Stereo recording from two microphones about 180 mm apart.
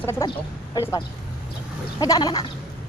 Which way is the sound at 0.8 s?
20° left (ahead or behind).